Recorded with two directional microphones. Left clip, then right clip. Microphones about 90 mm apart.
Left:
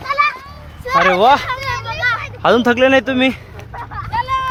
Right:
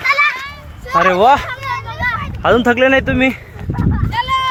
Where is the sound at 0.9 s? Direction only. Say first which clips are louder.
Right 1 dB; 25° right (ahead or behind).